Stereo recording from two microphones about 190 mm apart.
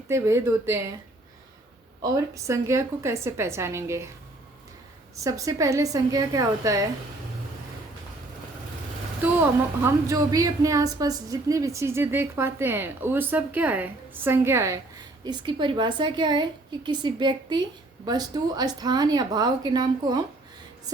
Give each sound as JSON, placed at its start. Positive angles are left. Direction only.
{"t": 0.1, "sound": "a woman's voice", "side_deg": -15}
{"t": 2.0, "sound": "a woman's voice", "side_deg": -15}
{"t": 5.1, "sound": "a woman's voice", "side_deg": -15}
{"t": 9.8, "sound": "a woman's voice", "side_deg": -20}